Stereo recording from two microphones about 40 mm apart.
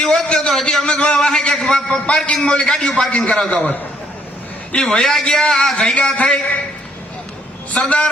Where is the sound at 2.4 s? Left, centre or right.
Left.